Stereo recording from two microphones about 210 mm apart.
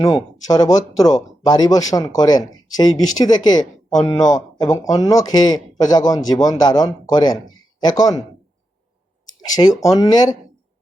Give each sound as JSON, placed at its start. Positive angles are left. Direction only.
{"t": 0.0, "sound": "a man's voice", "side_deg": 15}
{"t": 9.6, "sound": "speech", "side_deg": 20}